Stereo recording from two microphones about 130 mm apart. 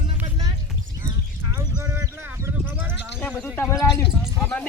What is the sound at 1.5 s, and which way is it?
Sheep, 20° right (ahead or behind).